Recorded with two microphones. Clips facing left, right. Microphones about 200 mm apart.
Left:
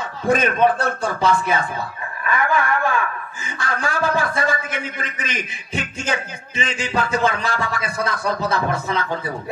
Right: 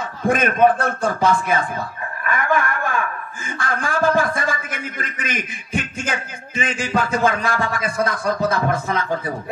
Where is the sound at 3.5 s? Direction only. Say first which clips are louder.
Right 1 dB; 50° right (ahead or behind).